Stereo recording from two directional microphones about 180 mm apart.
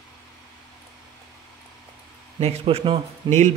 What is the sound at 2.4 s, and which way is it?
A man's voice, 35° right (ahead or behind).